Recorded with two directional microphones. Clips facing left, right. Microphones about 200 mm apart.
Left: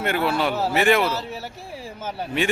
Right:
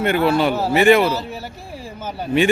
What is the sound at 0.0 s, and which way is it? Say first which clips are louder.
Speech: right 6 dB; centre (ahead or behind).